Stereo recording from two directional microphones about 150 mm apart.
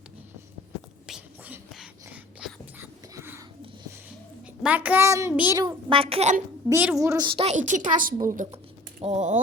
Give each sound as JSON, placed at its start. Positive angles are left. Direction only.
{"t": 1.0, "sound": "whispering", "side_deg": -5}
{"t": 2.4, "sound": "a sound", "side_deg": -5}
{"t": 4.6, "sound": "a child's voice", "side_deg": -10}
{"t": 5.5, "sound": "a woman's voice", "side_deg": -35}
{"t": 6.7, "sound": "a child's voice", "side_deg": -15}
{"t": 7.3, "sound": "a woman's voice", "side_deg": -40}
{"t": 7.5, "sound": "a woman's voice", "side_deg": -60}
{"t": 9.0, "sound": "speech", "side_deg": -45}